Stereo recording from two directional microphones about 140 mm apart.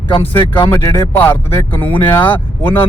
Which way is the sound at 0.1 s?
35° left (ahead or behind).